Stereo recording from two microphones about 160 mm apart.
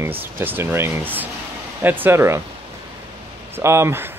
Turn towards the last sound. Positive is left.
turn(degrees=-15)  # may be behind; listen again after turning